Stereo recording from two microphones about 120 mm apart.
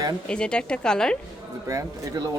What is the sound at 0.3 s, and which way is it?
Speech, 10° left (ahead or behind).